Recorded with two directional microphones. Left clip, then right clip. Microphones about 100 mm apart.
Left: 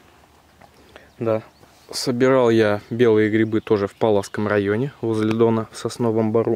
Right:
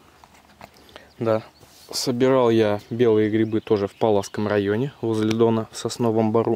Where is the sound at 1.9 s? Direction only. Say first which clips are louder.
Left 2 dB; centre (ahead or behind).